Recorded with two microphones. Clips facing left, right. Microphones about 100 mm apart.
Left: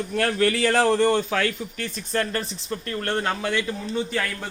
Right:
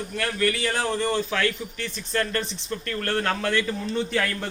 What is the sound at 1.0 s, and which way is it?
A man's voice, 50° left (ahead or behind).